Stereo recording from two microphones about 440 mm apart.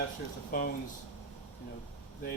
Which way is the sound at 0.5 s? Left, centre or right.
Centre.